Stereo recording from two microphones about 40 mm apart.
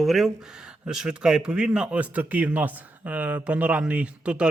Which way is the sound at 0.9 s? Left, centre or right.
Centre.